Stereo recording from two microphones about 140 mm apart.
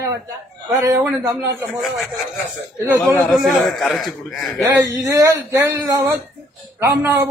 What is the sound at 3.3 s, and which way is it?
A man's voice, centre (ahead or behind).